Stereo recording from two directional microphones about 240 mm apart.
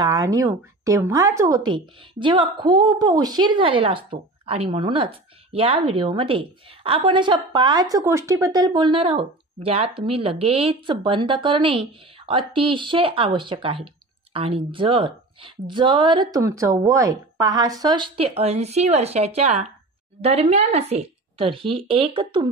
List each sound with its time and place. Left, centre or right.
0.0 s a woman's voice: centre